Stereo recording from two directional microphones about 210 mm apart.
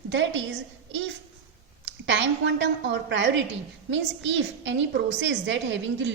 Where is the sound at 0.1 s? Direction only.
60° right (ahead or behind).